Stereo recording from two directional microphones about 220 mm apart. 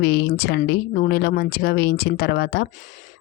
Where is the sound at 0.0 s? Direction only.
45° left (ahead or behind).